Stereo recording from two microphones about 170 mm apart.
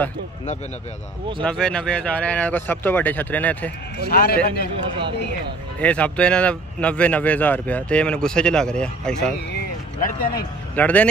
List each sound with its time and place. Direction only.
1.4 s speech: 5° left (ahead or behind)
4.1 s a man's voice: 65° left (ahead or behind)
5.8 s speech: 10° left (ahead or behind)
9.9 s a man's voice: 55° left (ahead or behind)
10.8 s speech: 10° left (ahead or behind)